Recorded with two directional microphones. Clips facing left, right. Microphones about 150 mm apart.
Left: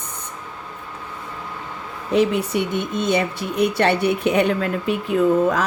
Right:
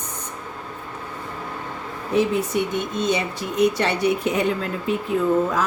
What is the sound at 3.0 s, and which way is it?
A woman's voice, 60° left (ahead or behind).